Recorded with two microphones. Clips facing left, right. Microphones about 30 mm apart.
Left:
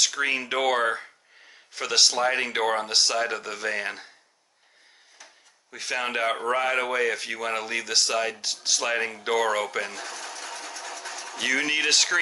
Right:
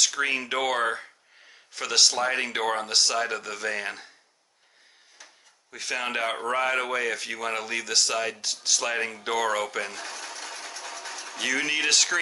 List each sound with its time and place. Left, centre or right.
0.0 s speech: centre
5.2 s speech: centre